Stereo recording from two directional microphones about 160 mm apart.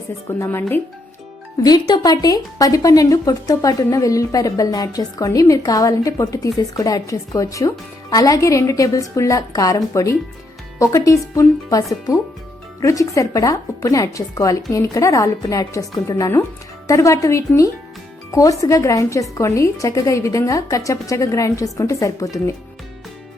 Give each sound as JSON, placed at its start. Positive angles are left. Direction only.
{"t": 0.3, "sound": "speech", "side_deg": 15}
{"t": 1.6, "sound": "a woman's voice", "side_deg": 25}